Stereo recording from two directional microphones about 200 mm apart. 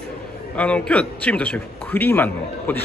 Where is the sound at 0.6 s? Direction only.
5° left (ahead or behind).